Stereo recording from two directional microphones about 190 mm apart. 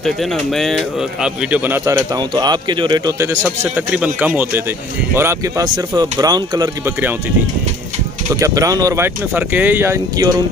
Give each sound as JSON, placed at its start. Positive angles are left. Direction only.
{"t": 0.0, "sound": "speech", "side_deg": 0}
{"t": 3.7, "sound": "speech", "side_deg": -10}
{"t": 8.3, "sound": "speech", "side_deg": -15}